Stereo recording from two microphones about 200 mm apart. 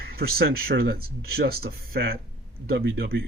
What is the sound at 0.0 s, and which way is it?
Speech, 50° right (ahead or behind).